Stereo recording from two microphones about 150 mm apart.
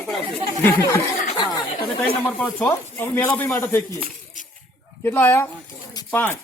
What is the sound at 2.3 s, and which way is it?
Speech, 10° left (ahead or behind).